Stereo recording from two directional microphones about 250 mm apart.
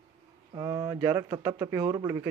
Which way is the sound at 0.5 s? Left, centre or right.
Centre.